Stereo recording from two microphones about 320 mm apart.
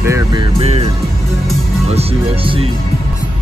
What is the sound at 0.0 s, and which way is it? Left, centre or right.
Music, centre.